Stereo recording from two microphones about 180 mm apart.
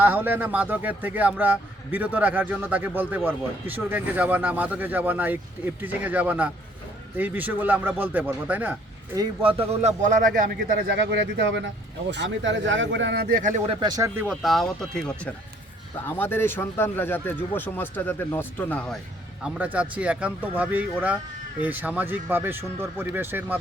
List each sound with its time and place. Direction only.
0.0 s speech: 10° right (ahead or behind)
9.1 s speech: 25° right (ahead or behind)
10.0 s a man's voice: 50° right (ahead or behind); by 13.4 s 65° right (ahead or behind)
13.7 s speech: 25° right (ahead or behind)
14.3 s speech: centre (ahead or behind)
19.5 s speech: 10° right (ahead or behind)